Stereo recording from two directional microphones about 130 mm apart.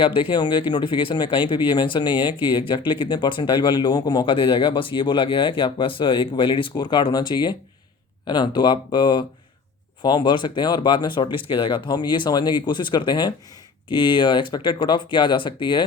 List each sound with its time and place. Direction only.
0.0 s speech: 40° left (ahead or behind)